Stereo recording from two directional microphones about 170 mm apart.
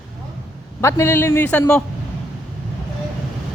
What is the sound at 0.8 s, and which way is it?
Speech, 15° left (ahead or behind).